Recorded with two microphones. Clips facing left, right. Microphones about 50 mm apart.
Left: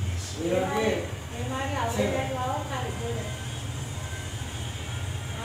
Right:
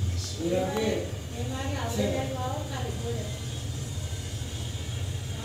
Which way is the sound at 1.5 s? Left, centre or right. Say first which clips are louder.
Left 4 dB; left.